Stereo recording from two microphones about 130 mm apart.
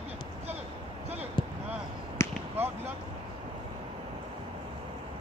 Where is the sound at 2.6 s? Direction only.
15° right (ahead or behind).